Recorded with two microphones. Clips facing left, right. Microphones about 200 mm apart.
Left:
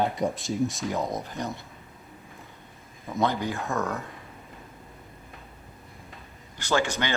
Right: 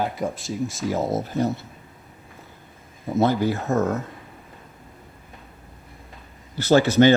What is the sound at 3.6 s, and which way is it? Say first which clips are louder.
Speech: right 7 dB; 40° right (ahead or behind).